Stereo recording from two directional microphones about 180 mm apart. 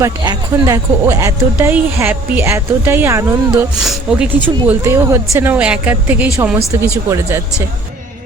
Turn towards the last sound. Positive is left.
turn(degrees=-15)  # may be behind; listen again after turning